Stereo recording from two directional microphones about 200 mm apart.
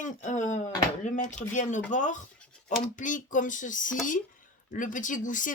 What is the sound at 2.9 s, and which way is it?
Speech, 40° left (ahead or behind).